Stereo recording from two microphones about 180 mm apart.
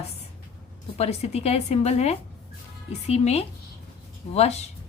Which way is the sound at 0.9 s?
35° left (ahead or behind).